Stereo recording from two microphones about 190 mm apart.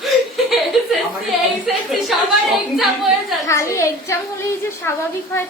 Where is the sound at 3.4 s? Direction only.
15° left (ahead or behind).